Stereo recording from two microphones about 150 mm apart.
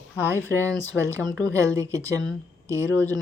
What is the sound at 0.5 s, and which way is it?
Speech, 20° right (ahead or behind).